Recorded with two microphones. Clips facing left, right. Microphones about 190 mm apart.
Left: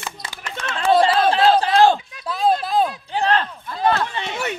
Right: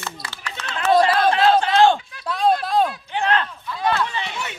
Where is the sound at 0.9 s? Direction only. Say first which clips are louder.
Left 1 dB; 30° left (ahead or behind).